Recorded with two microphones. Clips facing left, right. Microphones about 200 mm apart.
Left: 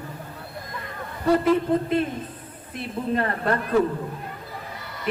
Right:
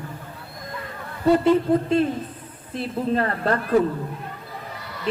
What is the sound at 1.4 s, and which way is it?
A man's voice, 30° right (ahead or behind).